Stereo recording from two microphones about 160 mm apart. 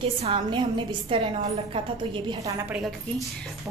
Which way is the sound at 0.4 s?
30° right (ahead or behind).